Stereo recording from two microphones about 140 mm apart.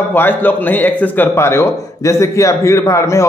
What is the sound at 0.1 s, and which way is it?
A man's voice, 15° left (ahead or behind).